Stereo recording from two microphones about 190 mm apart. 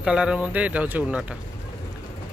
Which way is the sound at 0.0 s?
5° right (ahead or behind).